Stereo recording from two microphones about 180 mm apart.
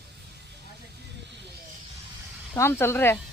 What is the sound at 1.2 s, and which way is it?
Snake, 75° right (ahead or behind).